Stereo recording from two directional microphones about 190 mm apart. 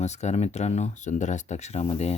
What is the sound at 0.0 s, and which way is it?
Speech, 35° left (ahead or behind).